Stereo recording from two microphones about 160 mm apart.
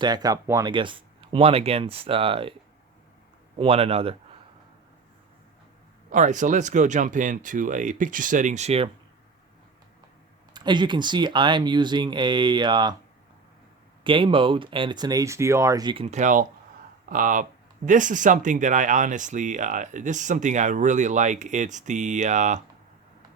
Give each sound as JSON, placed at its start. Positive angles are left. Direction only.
{"t": 0.0, "sound": "speech", "side_deg": -25}
{"t": 3.6, "sound": "speech", "side_deg": -35}
{"t": 6.1, "sound": "speech", "side_deg": -50}
{"t": 10.5, "sound": "speech", "side_deg": -25}
{"t": 14.0, "sound": "speech", "side_deg": -30}
{"t": 16.0, "sound": "speech", "side_deg": -50}